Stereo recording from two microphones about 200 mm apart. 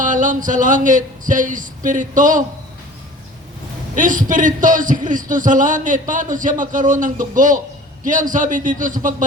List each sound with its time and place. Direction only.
0.0 s a man's voice: 40° right (ahead or behind)
3.9 s a man's voice: 40° right (ahead or behind)